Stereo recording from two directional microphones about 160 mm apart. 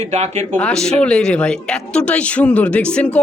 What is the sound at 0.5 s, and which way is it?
Speech, 5° left (ahead or behind).